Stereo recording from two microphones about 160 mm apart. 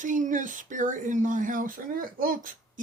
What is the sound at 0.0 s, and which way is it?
Speech, 55° right (ahead or behind).